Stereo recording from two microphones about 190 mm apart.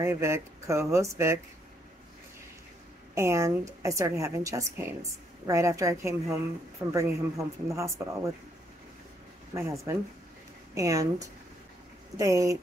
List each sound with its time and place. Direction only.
0.0 s a woman's voice: 15° right (ahead or behind)
3.2 s a woman's voice: 15° right (ahead or behind)
9.5 s a woman's voice: 15° right (ahead or behind)